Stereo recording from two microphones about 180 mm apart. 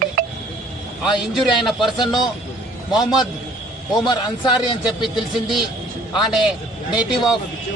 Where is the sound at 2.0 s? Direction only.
25° left (ahead or behind).